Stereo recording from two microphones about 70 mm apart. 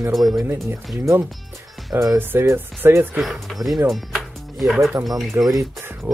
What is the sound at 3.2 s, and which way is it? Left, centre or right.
Speech, centre.